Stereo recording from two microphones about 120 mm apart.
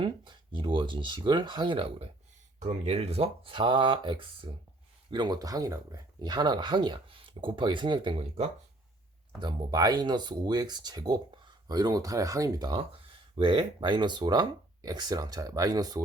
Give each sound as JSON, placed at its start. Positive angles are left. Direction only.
{"t": 0.0, "sound": "speech", "side_deg": -45}
{"t": 2.6, "sound": "speech", "side_deg": -60}
{"t": 9.4, "sound": "speech", "side_deg": -35}